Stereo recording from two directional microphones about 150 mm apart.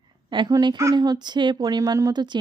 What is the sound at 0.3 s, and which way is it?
Speech, 30° right (ahead or behind).